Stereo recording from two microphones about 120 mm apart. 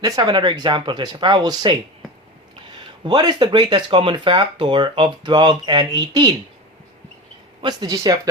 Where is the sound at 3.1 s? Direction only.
35° right (ahead or behind).